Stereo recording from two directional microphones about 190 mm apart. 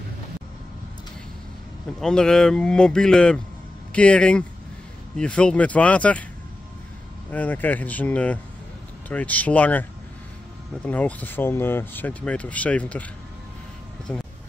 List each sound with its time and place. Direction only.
2.0 s speech: 5° left (ahead or behind)
7.2 s speech: 10° left (ahead or behind)
14.1 s speech: 5° left (ahead or behind)